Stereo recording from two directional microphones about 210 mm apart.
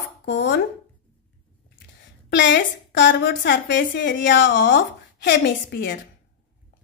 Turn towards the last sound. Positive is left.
turn(degrees=55)  # may be behind; listen again after turning